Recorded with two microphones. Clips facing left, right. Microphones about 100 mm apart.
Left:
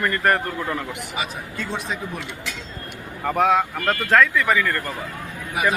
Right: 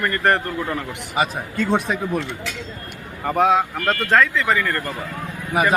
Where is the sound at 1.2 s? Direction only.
45° right (ahead or behind).